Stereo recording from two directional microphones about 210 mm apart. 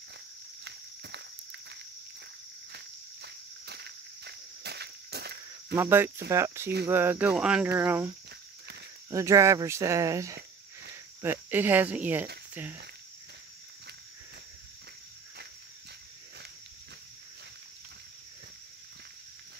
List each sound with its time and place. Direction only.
0.7 s walk: 55° right (ahead or behind)
2.7 s insect: 55° right (ahead or behind)
5.8 s speech: 10° right (ahead or behind)
9.1 s speech: 15° right (ahead or behind)